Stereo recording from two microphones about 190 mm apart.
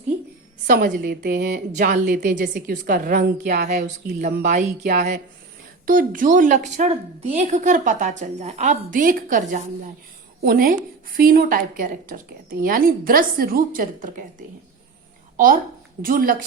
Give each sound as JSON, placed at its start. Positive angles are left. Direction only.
{"t": 0.7, "sound": "a woman's voice", "side_deg": -50}
{"t": 3.4, "sound": "a woman's voice", "side_deg": -45}
{"t": 16.0, "sound": "a woman's voice", "side_deg": -50}